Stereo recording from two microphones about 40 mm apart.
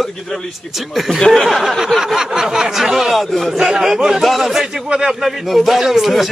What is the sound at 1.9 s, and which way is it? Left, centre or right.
Speech, centre.